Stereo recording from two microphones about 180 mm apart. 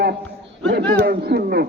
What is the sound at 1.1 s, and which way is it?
Speech, 55° right (ahead or behind).